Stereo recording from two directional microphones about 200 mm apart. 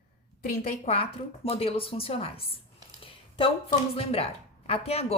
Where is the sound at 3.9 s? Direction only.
30° left (ahead or behind).